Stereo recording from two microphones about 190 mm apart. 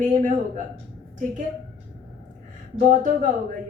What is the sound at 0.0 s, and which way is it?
Speech, 40° right (ahead or behind).